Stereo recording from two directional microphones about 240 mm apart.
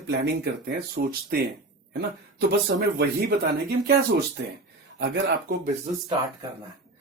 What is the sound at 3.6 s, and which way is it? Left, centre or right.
Speech, right.